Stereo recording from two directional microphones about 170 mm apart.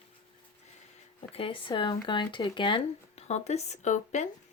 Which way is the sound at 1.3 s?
30° left (ahead or behind).